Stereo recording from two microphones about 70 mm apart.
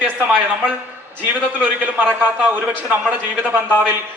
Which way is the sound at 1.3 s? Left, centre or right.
Right.